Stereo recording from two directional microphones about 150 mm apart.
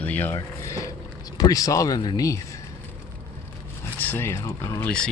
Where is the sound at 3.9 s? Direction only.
10° left (ahead or behind).